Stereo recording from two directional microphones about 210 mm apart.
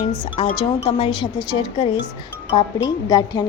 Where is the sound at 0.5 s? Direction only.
25° left (ahead or behind).